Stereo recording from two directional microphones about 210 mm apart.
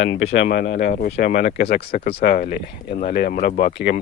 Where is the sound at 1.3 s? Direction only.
35° left (ahead or behind).